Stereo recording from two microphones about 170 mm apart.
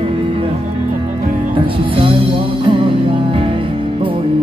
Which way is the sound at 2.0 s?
30° right (ahead or behind).